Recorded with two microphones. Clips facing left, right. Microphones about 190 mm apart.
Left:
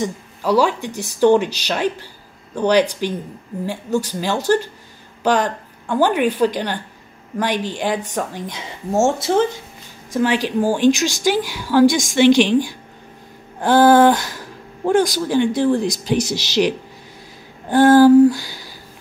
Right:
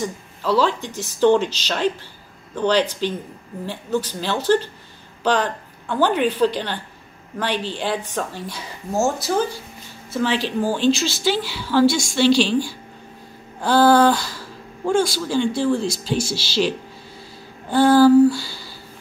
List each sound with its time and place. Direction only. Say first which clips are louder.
0.0 s a woman's voice: left 3 dB; 15° left (ahead or behind)
10.1 s speech: left 3 dB; 15° left (ahead or behind)
17.6 s a sound: left 3 dB; 15° left (ahead or behind)